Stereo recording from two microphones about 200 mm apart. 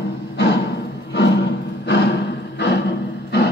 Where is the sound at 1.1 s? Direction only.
65° left (ahead or behind).